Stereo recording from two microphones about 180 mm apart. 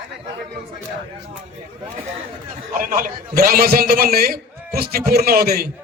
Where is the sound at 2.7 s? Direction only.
50° right (ahead or behind).